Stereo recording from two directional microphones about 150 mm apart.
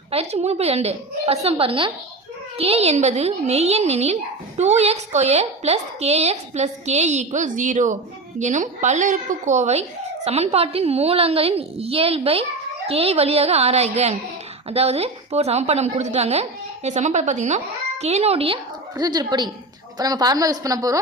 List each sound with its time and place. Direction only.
0.1 s a woman's voice: 45° right (ahead or behind)
18.9 s a woman's voice: 25° right (ahead or behind)